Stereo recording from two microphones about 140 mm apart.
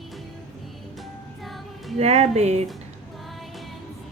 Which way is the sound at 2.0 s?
50° right (ahead or behind).